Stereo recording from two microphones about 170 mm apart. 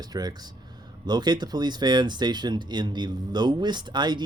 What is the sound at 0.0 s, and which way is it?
Speech, 25° right (ahead or behind).